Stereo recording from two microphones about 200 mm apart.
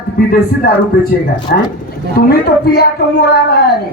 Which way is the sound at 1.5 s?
50° left (ahead or behind).